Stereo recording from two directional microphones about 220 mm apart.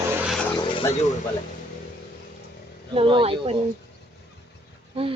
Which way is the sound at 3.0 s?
25° right (ahead or behind).